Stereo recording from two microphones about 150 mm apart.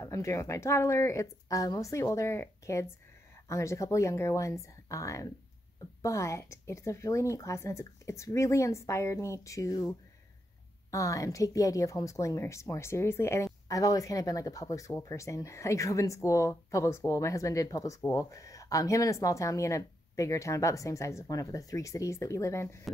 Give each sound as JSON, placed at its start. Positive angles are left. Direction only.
{"t": 0.0, "sound": "a woman's voice", "side_deg": 20}